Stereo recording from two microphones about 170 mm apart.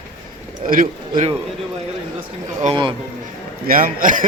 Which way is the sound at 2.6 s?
45° right (ahead or behind).